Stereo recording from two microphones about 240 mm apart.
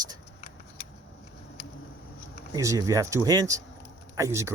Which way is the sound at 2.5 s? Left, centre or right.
Centre.